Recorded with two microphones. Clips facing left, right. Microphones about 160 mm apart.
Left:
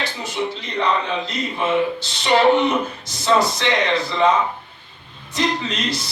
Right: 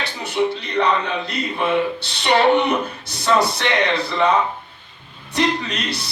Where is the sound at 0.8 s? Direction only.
60° right (ahead or behind).